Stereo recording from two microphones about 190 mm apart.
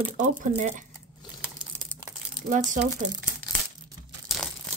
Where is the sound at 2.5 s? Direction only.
40° right (ahead or behind).